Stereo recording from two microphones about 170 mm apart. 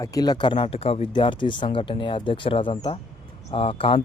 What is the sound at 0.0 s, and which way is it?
Speech, 20° left (ahead or behind).